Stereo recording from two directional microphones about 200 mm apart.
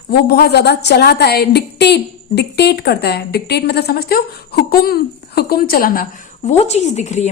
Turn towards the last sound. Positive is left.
turn(degrees=35)  # may be behind; listen again after turning